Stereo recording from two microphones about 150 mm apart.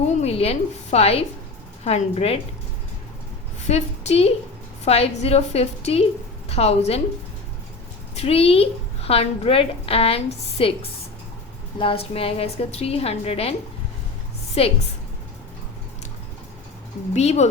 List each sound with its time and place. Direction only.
0.2 s a woman's voice: 45° left (ahead or behind)
3.7 s a woman's voice: 45° left (ahead or behind)
8.1 s a woman's voice: 45° left (ahead or behind)
11.8 s a woman's voice: 40° left (ahead or behind)
17.2 s a woman's voice: 45° left (ahead or behind)